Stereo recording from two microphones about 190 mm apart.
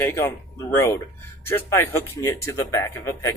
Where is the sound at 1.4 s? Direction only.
15° left (ahead or behind).